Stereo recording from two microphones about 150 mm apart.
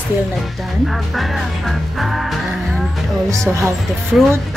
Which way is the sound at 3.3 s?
15° right (ahead or behind).